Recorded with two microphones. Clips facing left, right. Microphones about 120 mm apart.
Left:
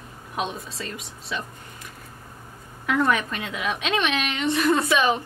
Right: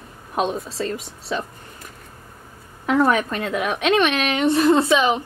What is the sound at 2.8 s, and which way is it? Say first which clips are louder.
Speech: right 4 dB; 30° right (ahead or behind).